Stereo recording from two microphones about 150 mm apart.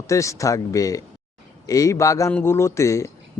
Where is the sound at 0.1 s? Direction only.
20° left (ahead or behind).